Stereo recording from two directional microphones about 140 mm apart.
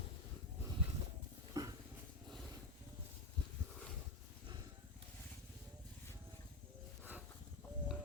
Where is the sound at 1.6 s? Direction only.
25° right (ahead or behind).